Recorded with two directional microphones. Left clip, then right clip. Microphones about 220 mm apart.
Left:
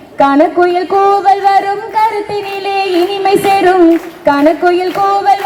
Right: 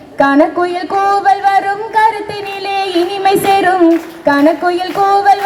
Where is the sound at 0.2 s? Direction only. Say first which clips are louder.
Left 2 dB; 20° right (ahead or behind).